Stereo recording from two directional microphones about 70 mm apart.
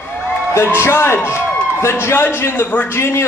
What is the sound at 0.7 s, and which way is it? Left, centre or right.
A man's voice, left.